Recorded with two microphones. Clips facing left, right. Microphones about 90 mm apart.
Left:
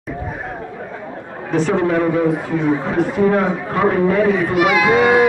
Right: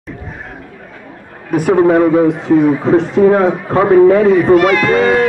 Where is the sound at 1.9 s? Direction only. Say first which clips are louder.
Right 6 dB; 25° right (ahead or behind).